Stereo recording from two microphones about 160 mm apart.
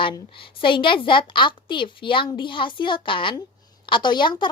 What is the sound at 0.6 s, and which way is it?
A woman's voice, 30° left (ahead or behind).